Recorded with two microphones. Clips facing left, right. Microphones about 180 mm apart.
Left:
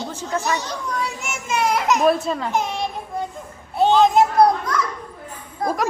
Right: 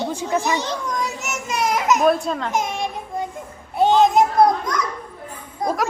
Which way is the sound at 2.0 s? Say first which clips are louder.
Even; centre (ahead or behind).